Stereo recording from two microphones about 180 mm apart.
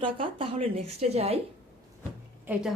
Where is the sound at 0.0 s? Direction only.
30° right (ahead or behind).